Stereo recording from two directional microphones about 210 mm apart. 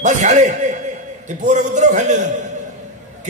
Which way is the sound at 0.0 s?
35° right (ahead or behind).